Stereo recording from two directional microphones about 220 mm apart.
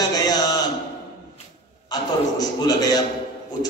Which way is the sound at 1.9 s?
15° left (ahead or behind).